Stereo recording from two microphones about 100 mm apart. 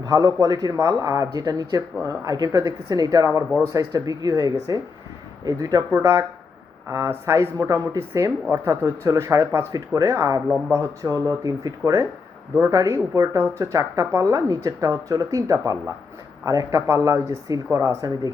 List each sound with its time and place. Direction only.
0.0 s speech: 35° right (ahead or behind)
6.0 s speech: 25° right (ahead or behind)